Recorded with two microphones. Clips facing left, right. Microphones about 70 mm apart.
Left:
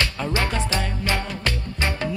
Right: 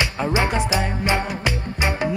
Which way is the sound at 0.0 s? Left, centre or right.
Centre.